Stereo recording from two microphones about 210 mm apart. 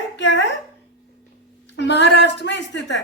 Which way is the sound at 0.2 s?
60° left (ahead or behind).